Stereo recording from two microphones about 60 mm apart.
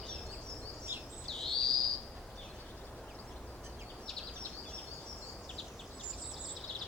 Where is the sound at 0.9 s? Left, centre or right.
Right.